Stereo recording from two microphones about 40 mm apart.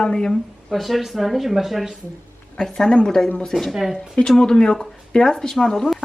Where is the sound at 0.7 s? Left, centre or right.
Centre.